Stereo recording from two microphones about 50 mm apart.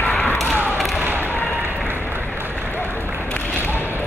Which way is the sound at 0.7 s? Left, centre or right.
Centre.